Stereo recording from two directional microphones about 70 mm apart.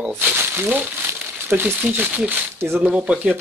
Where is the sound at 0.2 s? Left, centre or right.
Right.